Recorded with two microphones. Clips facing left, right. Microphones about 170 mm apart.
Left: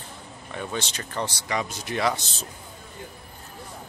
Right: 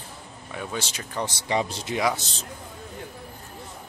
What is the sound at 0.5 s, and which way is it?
Speech, 5° right (ahead or behind).